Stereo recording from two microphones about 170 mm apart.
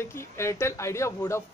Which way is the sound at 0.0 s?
15° left (ahead or behind).